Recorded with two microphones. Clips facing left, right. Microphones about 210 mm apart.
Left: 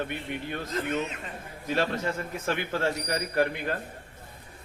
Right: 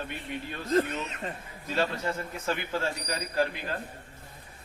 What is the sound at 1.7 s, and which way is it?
A man's voice, 60° left (ahead or behind).